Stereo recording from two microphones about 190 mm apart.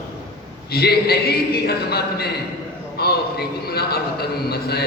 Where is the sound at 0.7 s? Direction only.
55° left (ahead or behind).